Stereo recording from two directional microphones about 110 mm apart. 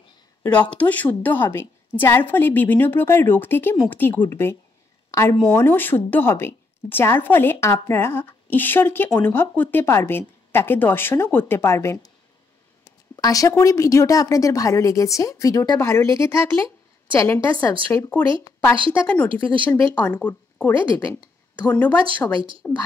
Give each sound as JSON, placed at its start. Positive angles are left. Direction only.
{"t": 0.6, "sound": "a woman's voice", "side_deg": 15}
{"t": 15.8, "sound": "a woman's voice", "side_deg": 25}
{"t": 17.9, "sound": "a woman's voice", "side_deg": 20}
{"t": 18.9, "sound": "a woman's voice", "side_deg": 15}